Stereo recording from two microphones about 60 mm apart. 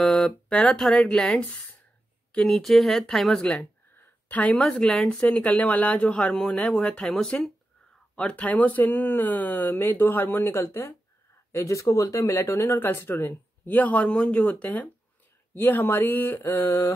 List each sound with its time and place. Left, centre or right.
0.0 s speech: centre
3.9 s a sound: left
4.6 s speech: centre
5.4 s speech: left
11.5 s speech: left
12.6 s speech: left
15.5 s speech: left